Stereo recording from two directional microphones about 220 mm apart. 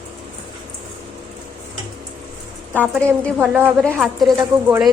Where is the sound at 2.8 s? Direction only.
5° left (ahead or behind).